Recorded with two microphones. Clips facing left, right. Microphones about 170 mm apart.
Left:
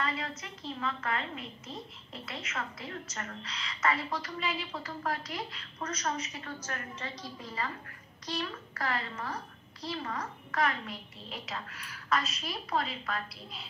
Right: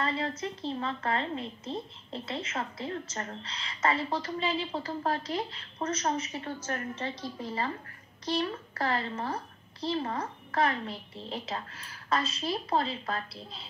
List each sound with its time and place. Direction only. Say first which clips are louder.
0.0 s a woman's voice: right 4 dB; 30° right (ahead or behind)